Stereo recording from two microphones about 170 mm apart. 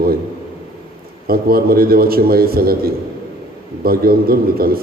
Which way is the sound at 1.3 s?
60° right (ahead or behind).